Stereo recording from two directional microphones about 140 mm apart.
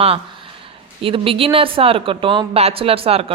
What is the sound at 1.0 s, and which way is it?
A woman's voice, 40° right (ahead or behind).